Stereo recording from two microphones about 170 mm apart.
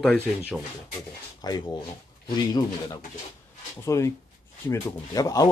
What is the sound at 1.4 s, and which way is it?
Speech, 25° left (ahead or behind).